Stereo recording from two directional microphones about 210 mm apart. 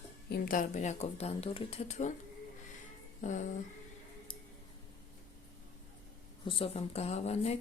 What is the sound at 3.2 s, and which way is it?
Speech, 35° left (ahead or behind).